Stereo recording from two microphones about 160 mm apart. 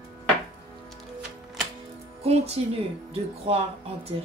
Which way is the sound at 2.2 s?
40° right (ahead or behind).